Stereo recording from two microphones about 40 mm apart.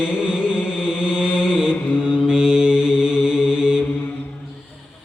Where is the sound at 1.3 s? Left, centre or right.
Centre.